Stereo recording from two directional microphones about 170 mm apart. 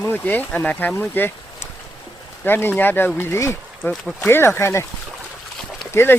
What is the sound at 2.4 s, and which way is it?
Speech, 10° left (ahead or behind).